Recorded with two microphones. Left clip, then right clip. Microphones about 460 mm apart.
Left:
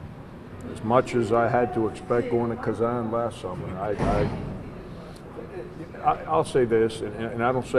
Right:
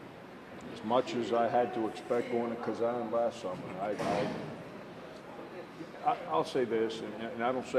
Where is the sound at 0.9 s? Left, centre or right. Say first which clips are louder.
Left 9 dB; left.